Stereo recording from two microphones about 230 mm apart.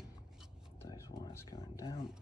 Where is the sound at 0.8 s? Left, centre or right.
Centre.